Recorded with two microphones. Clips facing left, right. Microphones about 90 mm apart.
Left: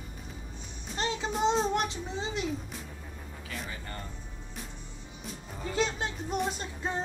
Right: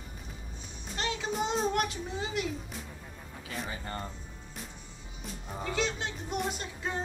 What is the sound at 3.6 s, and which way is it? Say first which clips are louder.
Speech: right 3 dB; 25° right (ahead or behind).